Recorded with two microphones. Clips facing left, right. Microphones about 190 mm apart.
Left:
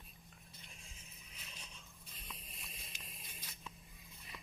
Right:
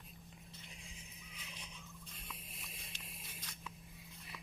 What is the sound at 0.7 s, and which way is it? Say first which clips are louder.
Neigh: right 4 dB; 15° right (ahead or behind).